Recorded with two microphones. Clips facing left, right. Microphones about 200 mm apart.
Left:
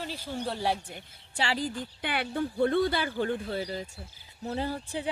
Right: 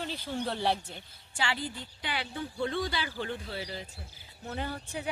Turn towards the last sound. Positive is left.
turn(degrees=30)  # may be behind; listen again after turning